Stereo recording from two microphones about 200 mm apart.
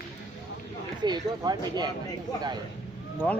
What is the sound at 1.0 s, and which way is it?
Speech, 20° right (ahead or behind).